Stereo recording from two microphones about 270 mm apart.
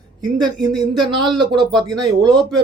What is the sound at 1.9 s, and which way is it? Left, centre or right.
Speech, centre.